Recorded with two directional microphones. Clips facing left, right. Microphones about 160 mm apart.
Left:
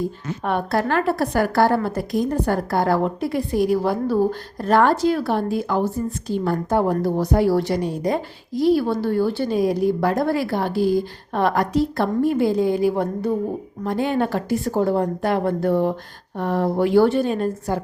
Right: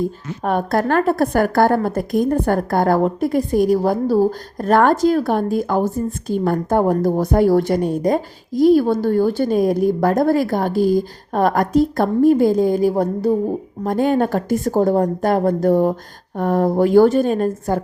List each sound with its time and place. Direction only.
0.4 s a woman's voice: 45° right (ahead or behind)